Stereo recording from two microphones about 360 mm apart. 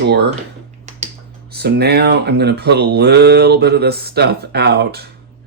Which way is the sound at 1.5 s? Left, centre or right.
Right.